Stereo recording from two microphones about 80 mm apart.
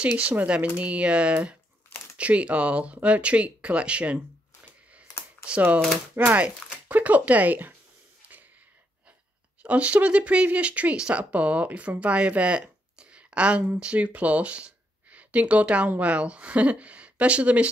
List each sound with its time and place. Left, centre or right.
0.0 s speech: centre
5.4 s speech: centre
9.6 s speech: centre